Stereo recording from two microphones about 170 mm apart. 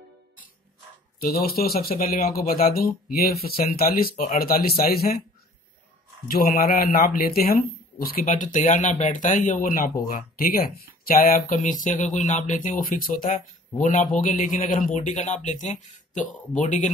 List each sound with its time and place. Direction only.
1.2 s speech: 65° left (ahead or behind)
6.2 s speech: 60° left (ahead or behind)